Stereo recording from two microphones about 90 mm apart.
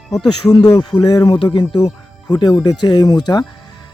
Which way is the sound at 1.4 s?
60° left (ahead or behind).